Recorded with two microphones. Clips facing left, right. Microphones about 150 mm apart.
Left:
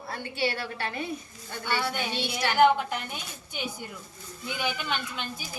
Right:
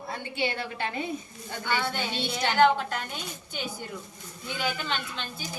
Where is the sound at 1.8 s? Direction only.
10° left (ahead or behind).